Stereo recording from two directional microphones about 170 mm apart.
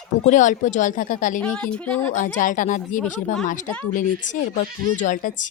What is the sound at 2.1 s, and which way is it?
Speech, 50° left (ahead or behind).